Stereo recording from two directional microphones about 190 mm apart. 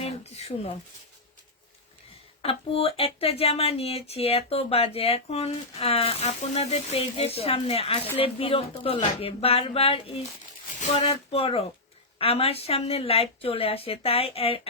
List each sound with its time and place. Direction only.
0.0 s speech: 35° left (ahead or behind)
2.4 s speech: 30° left (ahead or behind)